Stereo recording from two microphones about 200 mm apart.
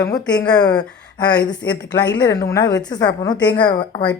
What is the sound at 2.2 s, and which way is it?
A woman's voice, 15° left (ahead or behind).